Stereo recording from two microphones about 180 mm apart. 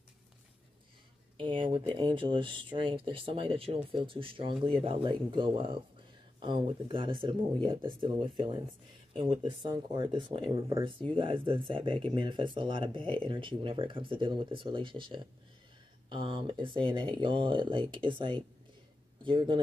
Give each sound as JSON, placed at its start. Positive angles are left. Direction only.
{"t": 1.4, "sound": "speech", "side_deg": -30}